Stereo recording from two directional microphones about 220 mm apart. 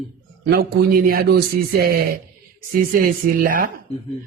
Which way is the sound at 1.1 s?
45° right (ahead or behind).